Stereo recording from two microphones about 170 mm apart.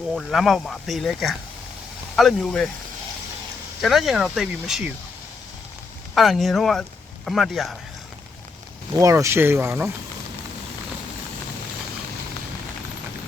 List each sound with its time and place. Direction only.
0.1 s speech: centre (ahead or behind)
3.8 s speech: centre (ahead or behind)
6.1 s speech: centre (ahead or behind)
8.9 s speech: 20° right (ahead or behind)